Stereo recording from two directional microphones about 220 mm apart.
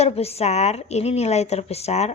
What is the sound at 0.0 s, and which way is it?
A woman's voice, 30° left (ahead or behind).